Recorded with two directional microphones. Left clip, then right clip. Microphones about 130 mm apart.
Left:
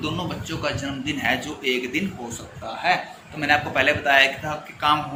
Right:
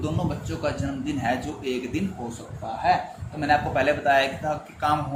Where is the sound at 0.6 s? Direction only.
50° right (ahead or behind).